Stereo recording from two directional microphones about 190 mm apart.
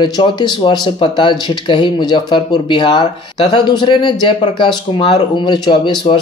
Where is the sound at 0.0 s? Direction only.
25° left (ahead or behind).